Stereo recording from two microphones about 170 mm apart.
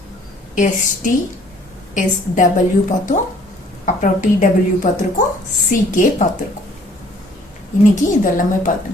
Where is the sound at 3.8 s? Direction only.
50° left (ahead or behind).